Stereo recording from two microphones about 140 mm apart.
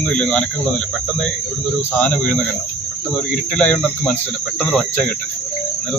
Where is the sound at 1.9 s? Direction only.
10° left (ahead or behind).